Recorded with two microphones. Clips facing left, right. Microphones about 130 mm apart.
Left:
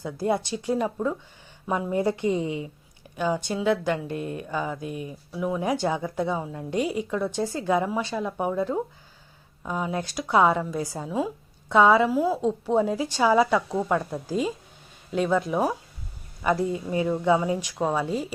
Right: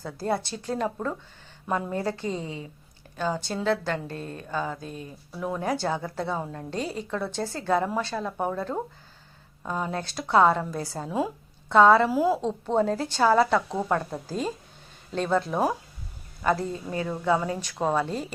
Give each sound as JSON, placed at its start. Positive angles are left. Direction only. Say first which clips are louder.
{"t": 0.0, "sound": "a woman's voice", "louder": "left 3 dB", "side_deg": 15}
{"t": 5.6, "sound": "a woman's voice", "louder": "even", "side_deg": 15}
{"t": 12.1, "sound": "a woman's voice", "louder": "right 1 dB", "side_deg": 0}
{"t": 12.4, "sound": "a woman's voice", "louder": "left 2 dB", "side_deg": 10}